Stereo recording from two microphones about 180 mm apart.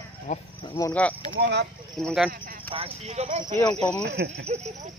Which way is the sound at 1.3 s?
75° right (ahead or behind).